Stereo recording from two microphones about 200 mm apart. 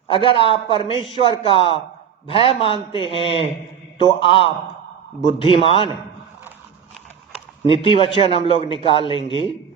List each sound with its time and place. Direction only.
0.3 s a man's voice: 25° left (ahead or behind)
7.7 s a man's voice: 25° left (ahead or behind)